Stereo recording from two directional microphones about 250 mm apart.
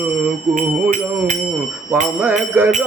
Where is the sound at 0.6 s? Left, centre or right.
Right.